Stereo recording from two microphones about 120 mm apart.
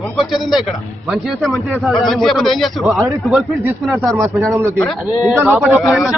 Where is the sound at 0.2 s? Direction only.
Centre (ahead or behind).